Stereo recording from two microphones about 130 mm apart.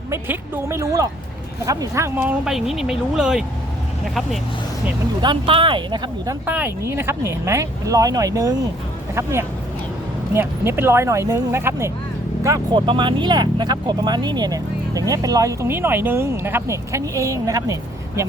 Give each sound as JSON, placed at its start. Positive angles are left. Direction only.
{"t": 0.1, "sound": "speech", "side_deg": -15}
{"t": 5.2, "sound": "speech", "side_deg": -40}
{"t": 6.4, "sound": "speech", "side_deg": -15}
{"t": 10.3, "sound": "speech", "side_deg": -15}
{"t": 12.7, "sound": "speech", "side_deg": -40}